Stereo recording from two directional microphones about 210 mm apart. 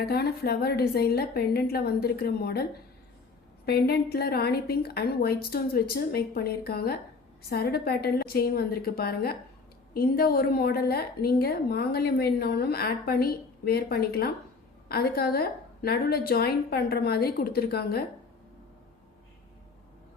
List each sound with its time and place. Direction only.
0.0 s a woman's voice: 50° left (ahead or behind)
3.7 s a woman's voice: 50° left (ahead or behind)